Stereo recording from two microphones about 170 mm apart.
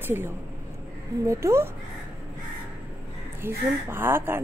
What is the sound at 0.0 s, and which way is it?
A woman's voice, 15° right (ahead or behind).